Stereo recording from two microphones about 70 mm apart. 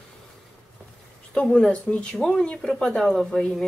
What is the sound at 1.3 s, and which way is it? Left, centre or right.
Speech, centre.